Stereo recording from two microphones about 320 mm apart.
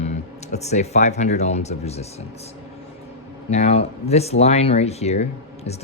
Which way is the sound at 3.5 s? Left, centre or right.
Centre.